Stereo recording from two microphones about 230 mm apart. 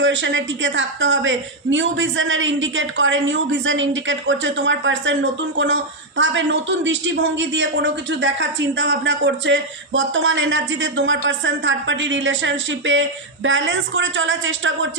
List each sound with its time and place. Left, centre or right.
0.0 s a woman's voice: right